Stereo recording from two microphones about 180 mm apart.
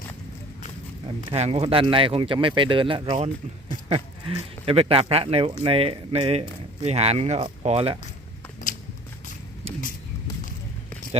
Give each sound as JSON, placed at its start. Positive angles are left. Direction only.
{"t": 1.3, "sound": "speech", "side_deg": -35}